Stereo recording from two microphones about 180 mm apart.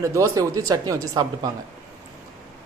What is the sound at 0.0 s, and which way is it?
Speech, 15° right (ahead or behind).